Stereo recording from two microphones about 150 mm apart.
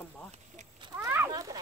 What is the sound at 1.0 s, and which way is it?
Speech, 20° right (ahead or behind).